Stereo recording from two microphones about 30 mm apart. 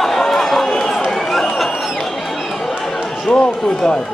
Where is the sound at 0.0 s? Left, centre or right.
Centre.